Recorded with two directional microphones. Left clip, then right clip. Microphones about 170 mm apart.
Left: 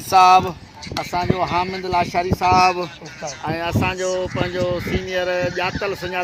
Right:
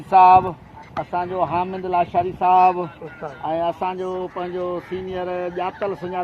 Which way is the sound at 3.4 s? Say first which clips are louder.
Right 1 dB; 40° right (ahead or behind).